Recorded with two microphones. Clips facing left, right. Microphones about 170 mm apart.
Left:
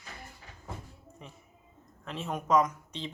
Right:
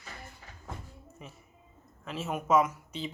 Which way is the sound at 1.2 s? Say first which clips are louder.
Right 1 dB; 5° right (ahead or behind).